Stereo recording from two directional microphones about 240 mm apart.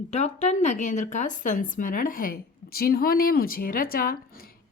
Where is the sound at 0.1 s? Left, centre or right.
Left.